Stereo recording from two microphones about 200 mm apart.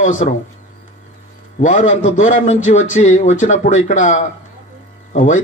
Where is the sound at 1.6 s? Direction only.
35° left (ahead or behind).